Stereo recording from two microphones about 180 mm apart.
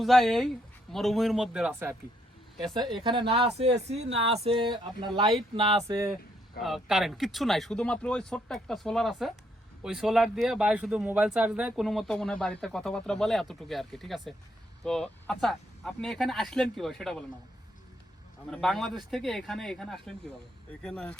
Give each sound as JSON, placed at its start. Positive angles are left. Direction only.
{"t": 0.0, "sound": "a man's voice", "side_deg": 0}
{"t": 2.9, "sound": "speech", "side_deg": -30}
{"t": 6.6, "sound": "a man's voice", "side_deg": 0}
{"t": 18.5, "sound": "a man's voice", "side_deg": 0}